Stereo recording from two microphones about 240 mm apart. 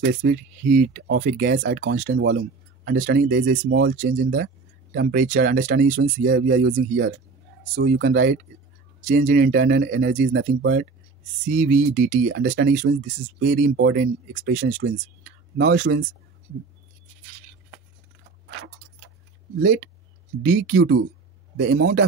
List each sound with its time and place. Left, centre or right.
0.0 s speech: right
3.6 s speech: right
4.9 s speech: right
6.2 s speech: right
9.0 s speech: right
11.4 s speech: right
20.4 s speech: right